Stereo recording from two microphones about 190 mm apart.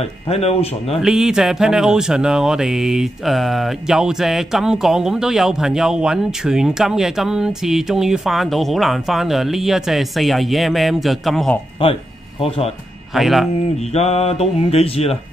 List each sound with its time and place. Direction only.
0.0 s speech: 35° left (ahead or behind)
1.0 s speech: 5° right (ahead or behind)
11.8 s speech: 30° left (ahead or behind)
13.1 s speech: centre (ahead or behind)
13.7 s speech: 35° left (ahead or behind)